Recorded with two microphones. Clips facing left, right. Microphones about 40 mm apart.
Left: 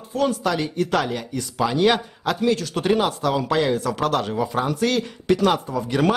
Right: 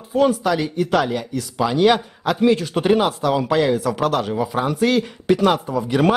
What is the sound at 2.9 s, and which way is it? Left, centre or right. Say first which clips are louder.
Speech: right 3 dB; centre.